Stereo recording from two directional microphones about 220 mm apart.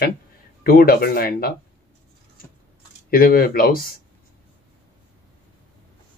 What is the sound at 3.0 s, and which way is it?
Speech, 40° left (ahead or behind).